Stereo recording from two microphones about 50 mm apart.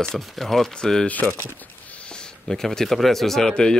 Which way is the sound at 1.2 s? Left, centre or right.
Right.